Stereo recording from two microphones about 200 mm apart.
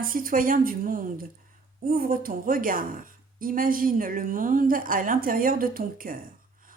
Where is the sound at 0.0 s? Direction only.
45° right (ahead or behind).